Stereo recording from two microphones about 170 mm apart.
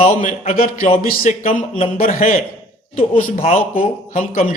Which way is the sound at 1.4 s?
35° left (ahead or behind).